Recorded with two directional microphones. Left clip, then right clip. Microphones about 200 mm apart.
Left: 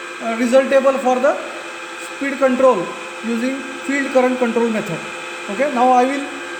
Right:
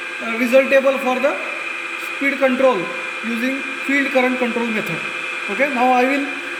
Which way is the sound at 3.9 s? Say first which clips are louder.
Left 1 dB; 10° left (ahead or behind).